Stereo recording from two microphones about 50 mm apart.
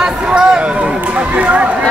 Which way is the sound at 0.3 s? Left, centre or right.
Centre.